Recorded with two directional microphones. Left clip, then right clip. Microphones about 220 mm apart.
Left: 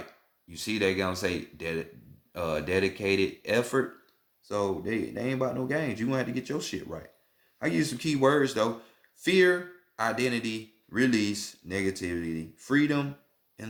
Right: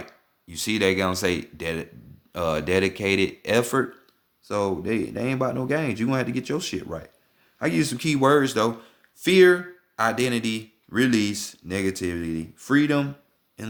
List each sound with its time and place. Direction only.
0.0 s speech: 40° right (ahead or behind)